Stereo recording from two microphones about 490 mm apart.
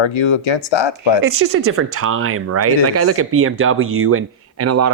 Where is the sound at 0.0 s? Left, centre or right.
Left.